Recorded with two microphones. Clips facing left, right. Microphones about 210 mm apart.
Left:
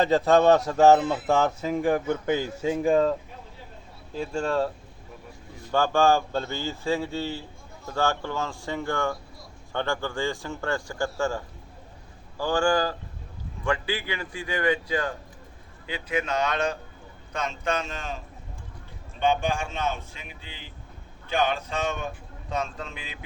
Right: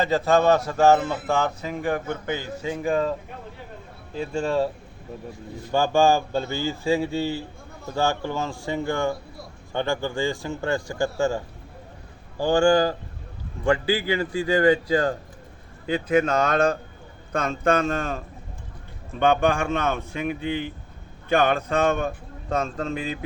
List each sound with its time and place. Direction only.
0.0 s speech: centre (ahead or behind)
4.2 s speech: 5° right (ahead or behind)
5.7 s a man's voice: 10° right (ahead or behind); by 23.1 s 45° right (ahead or behind)